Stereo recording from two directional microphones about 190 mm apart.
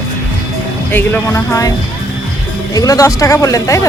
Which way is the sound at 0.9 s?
10° left (ahead or behind).